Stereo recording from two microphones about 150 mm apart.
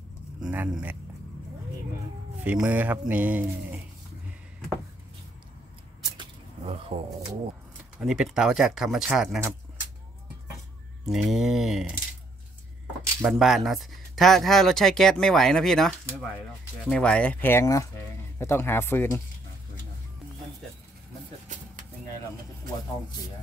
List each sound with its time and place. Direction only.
0.4 s speech: 5° right (ahead or behind)
2.4 s speech: 10° right (ahead or behind)
6.1 s vehicle: 40° right (ahead or behind)
8.0 s speech: 5° right (ahead or behind)
11.1 s speech: centre (ahead or behind)
13.2 s speech: 5° right (ahead or behind); by 19.2 s 15° left (ahead or behind)